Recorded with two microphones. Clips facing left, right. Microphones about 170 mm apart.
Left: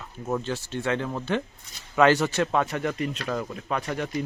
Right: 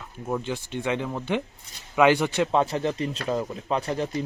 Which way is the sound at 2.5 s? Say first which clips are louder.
Right 2 dB; 30° right (ahead or behind).